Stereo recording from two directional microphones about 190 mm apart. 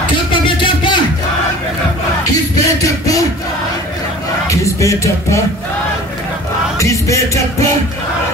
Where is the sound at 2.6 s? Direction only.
15° left (ahead or behind).